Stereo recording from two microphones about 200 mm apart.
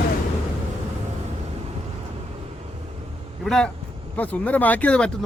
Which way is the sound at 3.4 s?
Centre (ahead or behind).